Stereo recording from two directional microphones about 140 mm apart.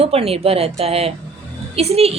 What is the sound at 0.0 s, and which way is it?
A woman's voice, 45° right (ahead or behind).